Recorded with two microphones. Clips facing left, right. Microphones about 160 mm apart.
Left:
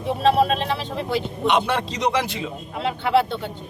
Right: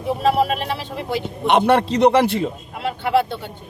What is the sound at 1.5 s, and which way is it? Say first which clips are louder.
Speech: right 6 dB; 55° right (ahead or behind).